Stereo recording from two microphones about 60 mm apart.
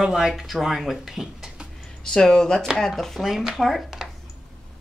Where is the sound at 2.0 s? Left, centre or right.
Centre.